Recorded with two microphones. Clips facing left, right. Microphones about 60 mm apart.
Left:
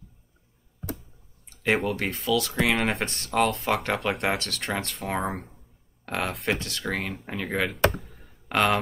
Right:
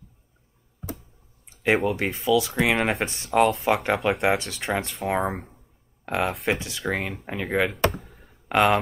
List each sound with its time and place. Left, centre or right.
1.9 s speech: centre
6.0 s speech: centre
8.5 s speech: centre